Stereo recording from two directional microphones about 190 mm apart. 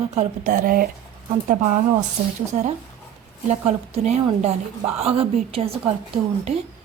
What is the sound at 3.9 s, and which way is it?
Speech, 35° right (ahead or behind).